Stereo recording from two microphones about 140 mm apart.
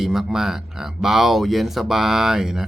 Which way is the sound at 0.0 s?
Centre (ahead or behind).